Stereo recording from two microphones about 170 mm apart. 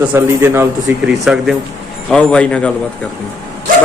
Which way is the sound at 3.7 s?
50° right (ahead or behind).